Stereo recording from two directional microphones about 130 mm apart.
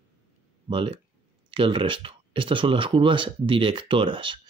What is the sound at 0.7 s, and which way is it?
Speech, 40° right (ahead or behind).